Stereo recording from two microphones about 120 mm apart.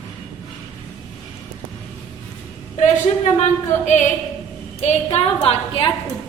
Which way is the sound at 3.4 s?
85° left.